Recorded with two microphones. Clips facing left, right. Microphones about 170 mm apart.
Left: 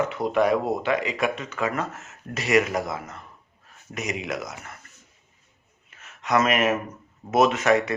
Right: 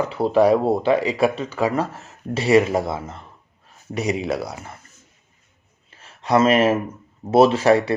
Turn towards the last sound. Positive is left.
turn(degrees=-30)  # may be behind; listen again after turning